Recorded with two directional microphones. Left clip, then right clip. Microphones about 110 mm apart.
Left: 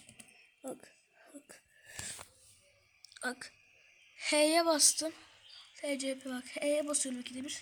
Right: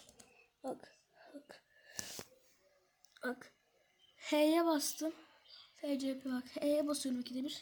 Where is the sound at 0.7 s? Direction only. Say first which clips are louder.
Right 1 dB; 35° left (ahead or behind).